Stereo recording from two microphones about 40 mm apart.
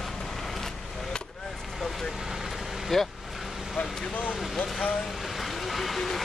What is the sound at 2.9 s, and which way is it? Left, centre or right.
Speech, centre.